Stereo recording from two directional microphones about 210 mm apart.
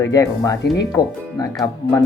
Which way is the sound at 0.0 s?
15° left (ahead or behind).